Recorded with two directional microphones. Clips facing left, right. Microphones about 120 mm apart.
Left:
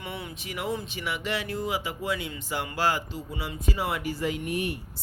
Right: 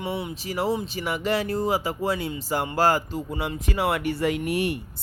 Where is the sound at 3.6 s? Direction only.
65° right (ahead or behind).